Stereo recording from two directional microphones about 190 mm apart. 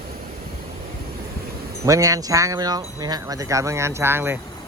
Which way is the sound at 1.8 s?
15° right (ahead or behind).